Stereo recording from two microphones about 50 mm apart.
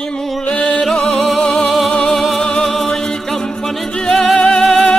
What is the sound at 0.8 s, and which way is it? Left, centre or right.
Music, centre.